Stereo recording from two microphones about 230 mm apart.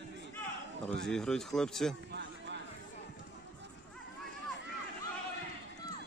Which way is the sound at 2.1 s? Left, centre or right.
Right.